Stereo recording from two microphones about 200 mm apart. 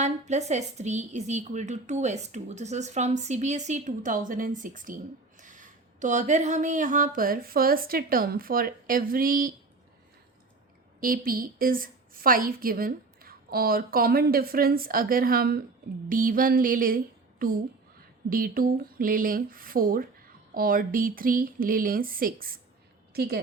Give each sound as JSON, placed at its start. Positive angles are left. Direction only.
{"t": 0.0, "sound": "a woman's voice", "side_deg": -35}
{"t": 11.0, "sound": "a woman's voice", "side_deg": -45}